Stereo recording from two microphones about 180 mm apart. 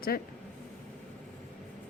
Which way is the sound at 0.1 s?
55° left (ahead or behind).